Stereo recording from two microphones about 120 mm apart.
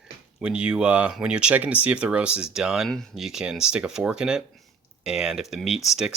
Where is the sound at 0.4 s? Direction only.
10° right (ahead or behind).